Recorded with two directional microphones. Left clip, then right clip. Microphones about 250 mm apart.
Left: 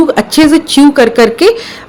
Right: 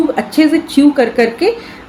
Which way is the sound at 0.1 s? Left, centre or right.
Left.